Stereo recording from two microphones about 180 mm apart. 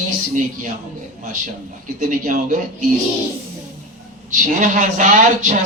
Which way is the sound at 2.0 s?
45° right (ahead or behind).